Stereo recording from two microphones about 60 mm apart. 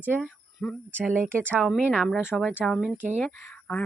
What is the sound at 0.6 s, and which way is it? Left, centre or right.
Speech, centre.